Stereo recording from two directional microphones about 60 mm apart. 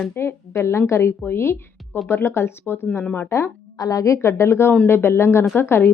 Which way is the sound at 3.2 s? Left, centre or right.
Left.